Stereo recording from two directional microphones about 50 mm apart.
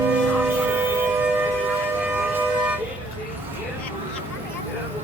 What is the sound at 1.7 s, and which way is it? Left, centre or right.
Siren, right.